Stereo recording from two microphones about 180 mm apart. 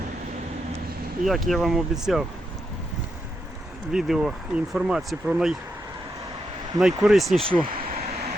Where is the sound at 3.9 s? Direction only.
Centre (ahead or behind).